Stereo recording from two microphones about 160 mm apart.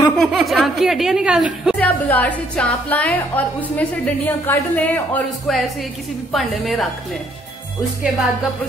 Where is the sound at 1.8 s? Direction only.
10° left (ahead or behind).